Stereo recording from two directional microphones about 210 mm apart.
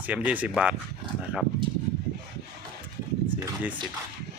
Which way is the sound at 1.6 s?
25° right (ahead or behind).